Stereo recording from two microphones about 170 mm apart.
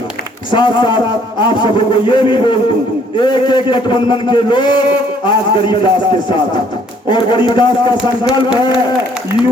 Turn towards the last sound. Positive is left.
turn(degrees=25)  # may be behind; listen again after turning